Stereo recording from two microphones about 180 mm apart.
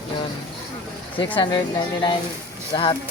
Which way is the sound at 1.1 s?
30° left (ahead or behind).